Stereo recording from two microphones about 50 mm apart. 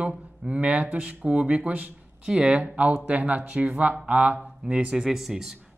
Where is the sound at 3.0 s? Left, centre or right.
Right.